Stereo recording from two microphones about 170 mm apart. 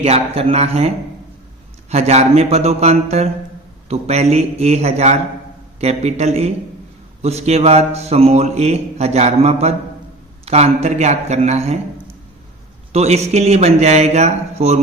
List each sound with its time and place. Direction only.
0.0 s a man's voice: 35° right (ahead or behind)
12.9 s a man's voice: 40° right (ahead or behind)